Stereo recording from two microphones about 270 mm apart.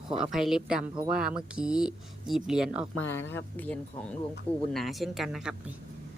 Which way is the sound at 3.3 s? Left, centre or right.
Centre.